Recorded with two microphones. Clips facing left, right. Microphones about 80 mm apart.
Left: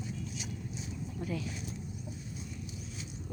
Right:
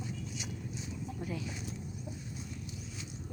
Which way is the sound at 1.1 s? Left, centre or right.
Centre.